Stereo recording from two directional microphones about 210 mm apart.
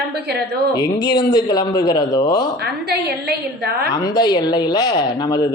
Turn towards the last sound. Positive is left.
turn(degrees=15)  # may be behind; listen again after turning